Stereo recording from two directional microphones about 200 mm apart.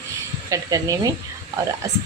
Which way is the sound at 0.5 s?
15° right (ahead or behind).